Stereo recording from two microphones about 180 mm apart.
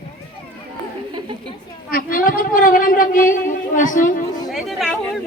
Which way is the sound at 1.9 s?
50° left (ahead or behind).